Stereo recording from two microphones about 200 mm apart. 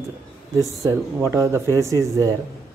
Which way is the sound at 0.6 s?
15° right (ahead or behind).